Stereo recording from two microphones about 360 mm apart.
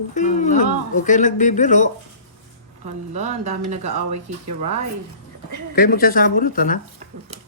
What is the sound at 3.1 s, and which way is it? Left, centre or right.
Speech, centre.